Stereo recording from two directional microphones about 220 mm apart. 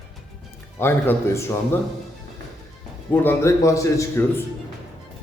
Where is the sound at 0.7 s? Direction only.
10° left (ahead or behind).